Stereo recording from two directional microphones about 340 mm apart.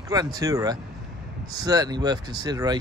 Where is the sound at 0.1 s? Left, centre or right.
Centre.